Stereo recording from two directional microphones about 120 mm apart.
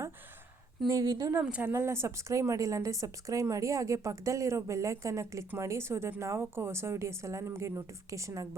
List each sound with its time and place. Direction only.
0.9 s speech: 30° right (ahead or behind)
1.3 s speech: 15° right (ahead or behind)